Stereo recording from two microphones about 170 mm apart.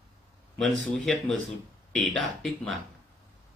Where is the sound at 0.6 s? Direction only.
Centre (ahead or behind).